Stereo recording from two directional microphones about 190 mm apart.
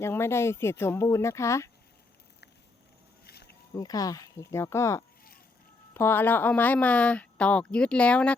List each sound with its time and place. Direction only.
0.0 s speech: 15° left (ahead or behind)
3.2 s a sound: 60° left (ahead or behind)
3.8 s speech: 20° left (ahead or behind)